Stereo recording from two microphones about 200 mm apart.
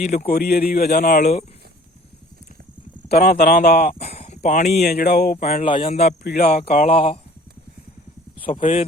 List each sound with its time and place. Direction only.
0.0 s speech: 35° left (ahead or behind)
0.3 s speech: 50° left (ahead or behind)
1.2 s speech: 30° left (ahead or behind)
3.1 s speech: 55° left (ahead or behind)
3.9 s a sound: 35° left (ahead or behind)
4.8 s speech: 55° left (ahead or behind)
5.5 s speech: 30° left (ahead or behind)
8.4 s speech: 25° left (ahead or behind)